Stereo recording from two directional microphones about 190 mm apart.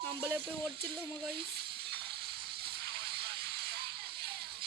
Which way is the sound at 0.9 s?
55° right (ahead or behind).